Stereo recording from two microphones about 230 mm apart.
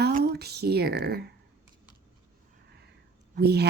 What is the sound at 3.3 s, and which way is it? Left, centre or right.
Speech, right.